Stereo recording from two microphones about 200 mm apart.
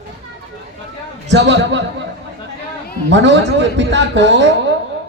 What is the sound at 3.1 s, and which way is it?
A man's voice, 65° right (ahead or behind).